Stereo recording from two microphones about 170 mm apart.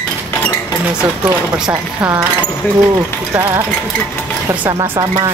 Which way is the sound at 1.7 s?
15° right (ahead or behind).